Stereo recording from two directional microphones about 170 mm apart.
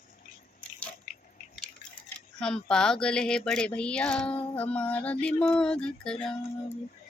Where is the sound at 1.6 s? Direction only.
5° left (ahead or behind).